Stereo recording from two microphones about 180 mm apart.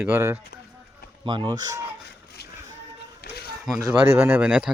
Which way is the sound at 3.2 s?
55° left (ahead or behind).